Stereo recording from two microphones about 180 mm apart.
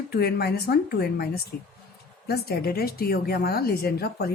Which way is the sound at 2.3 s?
60° left (ahead or behind).